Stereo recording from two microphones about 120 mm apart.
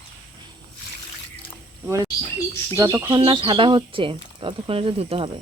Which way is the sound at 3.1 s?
45° right (ahead or behind).